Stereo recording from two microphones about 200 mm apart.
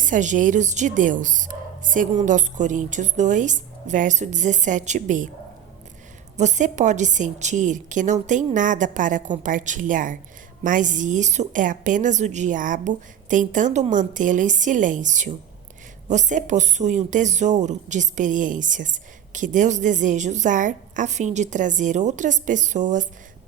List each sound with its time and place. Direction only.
0.0 s speech: 40° right (ahead or behind)
6.3 s speech: 35° right (ahead or behind)